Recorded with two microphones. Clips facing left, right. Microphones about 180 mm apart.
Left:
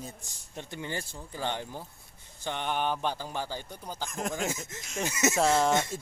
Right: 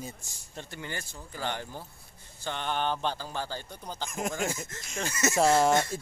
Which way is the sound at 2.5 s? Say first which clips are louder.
Even; 15° left (ahead or behind).